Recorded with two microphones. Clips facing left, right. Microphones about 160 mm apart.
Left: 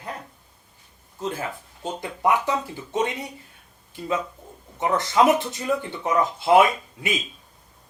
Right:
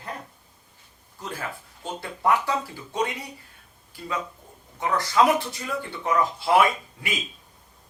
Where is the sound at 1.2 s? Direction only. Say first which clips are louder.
Left 5 dB; 25° left (ahead or behind).